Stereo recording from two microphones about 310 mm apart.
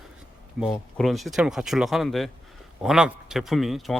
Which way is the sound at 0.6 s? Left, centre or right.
Centre.